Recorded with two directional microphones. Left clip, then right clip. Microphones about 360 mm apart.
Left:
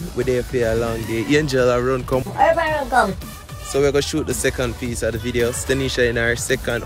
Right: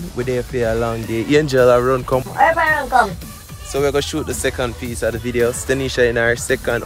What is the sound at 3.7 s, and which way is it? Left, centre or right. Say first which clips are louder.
Speech: even; centre.